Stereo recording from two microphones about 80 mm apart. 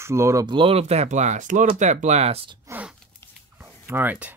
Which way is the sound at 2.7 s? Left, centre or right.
Right.